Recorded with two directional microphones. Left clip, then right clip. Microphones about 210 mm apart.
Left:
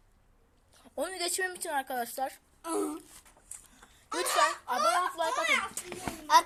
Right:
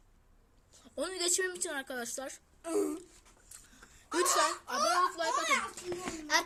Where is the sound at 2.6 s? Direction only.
Centre (ahead or behind).